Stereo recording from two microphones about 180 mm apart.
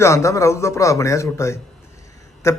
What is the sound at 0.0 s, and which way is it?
A man's voice, 15° left (ahead or behind).